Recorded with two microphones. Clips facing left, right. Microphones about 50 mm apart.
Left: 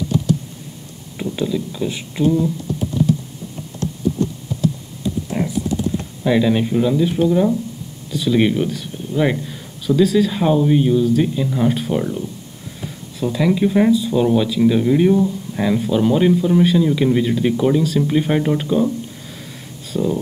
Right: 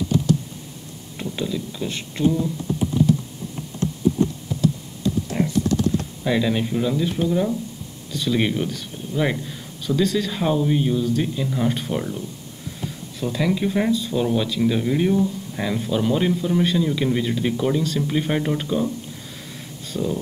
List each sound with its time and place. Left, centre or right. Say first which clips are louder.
1.1 s speech: left 5 dB; centre
5.4 s typing: left 1 dB; centre
6.2 s speech: left 6 dB; centre
13.2 s speech: left 5 dB; centre
19.9 s speech: left 5 dB; centre